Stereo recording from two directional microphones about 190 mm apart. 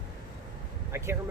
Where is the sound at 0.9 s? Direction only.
15° right (ahead or behind).